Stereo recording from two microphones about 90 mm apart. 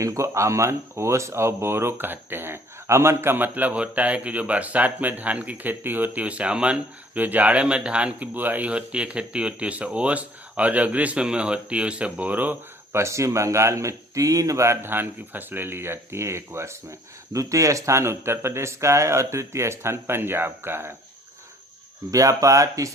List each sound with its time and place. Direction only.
0.0 s speech: 35° right (ahead or behind); by 12.5 s 20° right (ahead or behind)
12.9 s speech: 30° right (ahead or behind)
22.1 s speech: 40° right (ahead or behind)